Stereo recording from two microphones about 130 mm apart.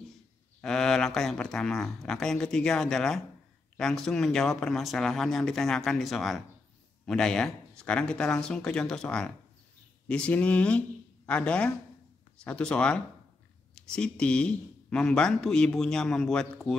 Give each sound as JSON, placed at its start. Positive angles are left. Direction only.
{"t": 0.6, "sound": "speech", "side_deg": 5}